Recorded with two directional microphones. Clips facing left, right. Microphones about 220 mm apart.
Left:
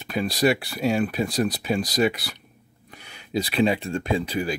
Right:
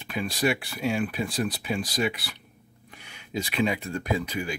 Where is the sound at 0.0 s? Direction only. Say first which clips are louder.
Left 5 dB; 40° left (ahead or behind).